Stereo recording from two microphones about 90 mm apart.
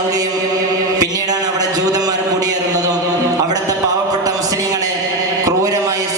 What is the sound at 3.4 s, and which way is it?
Music, 40° right (ahead or behind).